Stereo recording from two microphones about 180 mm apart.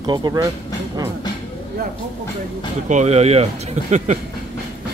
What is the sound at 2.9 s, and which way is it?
Speech, 40° right (ahead or behind).